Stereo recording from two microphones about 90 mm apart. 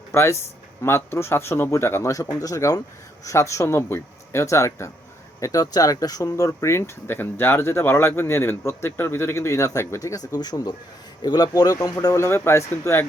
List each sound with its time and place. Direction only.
0.1 s speech: 30° left (ahead or behind)